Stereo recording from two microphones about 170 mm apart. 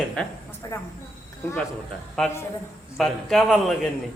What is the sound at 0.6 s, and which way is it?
Speech, 20° left (ahead or behind).